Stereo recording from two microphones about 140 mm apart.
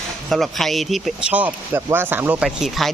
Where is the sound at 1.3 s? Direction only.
10° right (ahead or behind).